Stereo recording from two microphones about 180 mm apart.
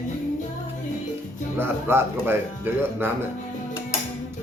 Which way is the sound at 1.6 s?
15° right (ahead or behind).